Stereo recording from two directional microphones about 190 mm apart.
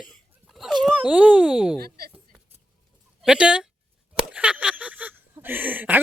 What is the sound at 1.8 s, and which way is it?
Speech, 55° right (ahead or behind).